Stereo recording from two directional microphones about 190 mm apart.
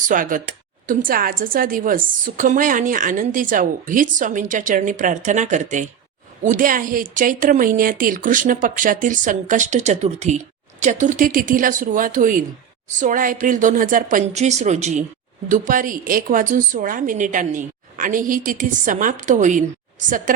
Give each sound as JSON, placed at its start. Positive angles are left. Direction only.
{"t": 0.1, "sound": "speech", "side_deg": -45}